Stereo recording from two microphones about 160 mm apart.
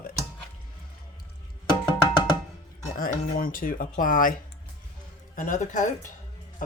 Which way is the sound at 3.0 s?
60° left (ahead or behind).